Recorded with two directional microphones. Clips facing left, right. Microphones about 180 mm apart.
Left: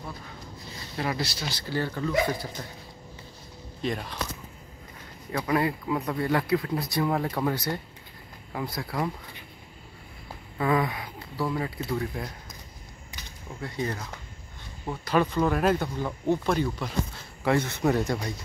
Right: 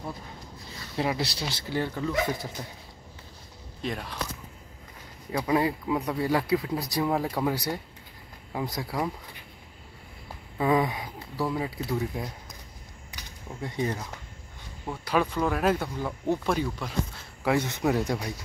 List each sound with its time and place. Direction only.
0.9 s speech: 20° right (ahead or behind)
3.8 s speech: centre (ahead or behind)
5.3 s speech: 15° right (ahead or behind)
10.6 s speech: 15° right (ahead or behind)
13.6 s speech: 20° right (ahead or behind)
15.0 s speech: 5° right (ahead or behind)